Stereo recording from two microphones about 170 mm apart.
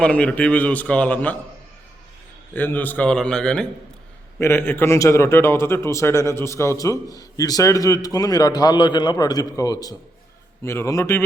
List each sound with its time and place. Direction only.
0.0 s a man's voice: 5° left (ahead or behind)
2.5 s a man's voice: 10° left (ahead or behind)